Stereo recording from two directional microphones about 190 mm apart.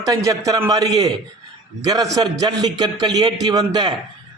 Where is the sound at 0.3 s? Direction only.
20° right (ahead or behind).